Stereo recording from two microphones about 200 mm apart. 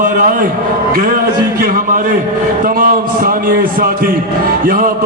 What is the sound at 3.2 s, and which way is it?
Speech, 45° right (ahead or behind).